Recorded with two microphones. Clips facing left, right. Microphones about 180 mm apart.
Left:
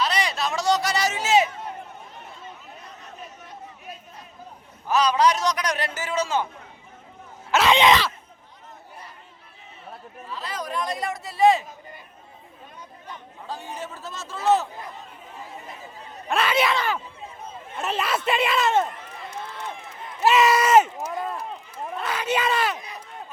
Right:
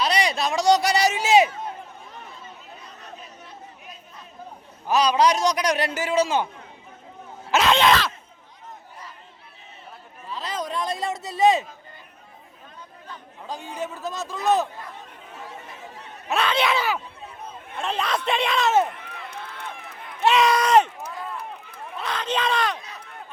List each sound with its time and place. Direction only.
0.0 s a sound: 15° right (ahead or behind)
4.9 s a man's voice: 15° right (ahead or behind)
7.7 s speech: 15° left (ahead or behind)
10.3 s a sound: 20° right (ahead or behind)
13.5 s a man's voice: 15° right (ahead or behind)
14.9 s chatter: 70° right (ahead or behind)
16.3 s speech: 5° left (ahead or behind)
16.7 s a man's voice: 10° right (ahead or behind)
17.8 s speech: 5° left (ahead or behind)
18.9 s run: 65° right (ahead or behind)
20.2 s a sound: 5° left (ahead or behind)
22.0 s a sound: 10° left (ahead or behind)